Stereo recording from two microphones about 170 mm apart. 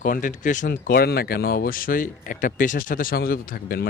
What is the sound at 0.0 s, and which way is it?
Speech, 50° left (ahead or behind).